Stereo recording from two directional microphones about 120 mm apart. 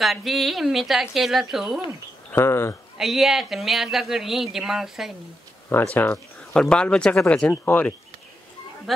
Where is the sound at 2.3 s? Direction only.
20° left (ahead or behind).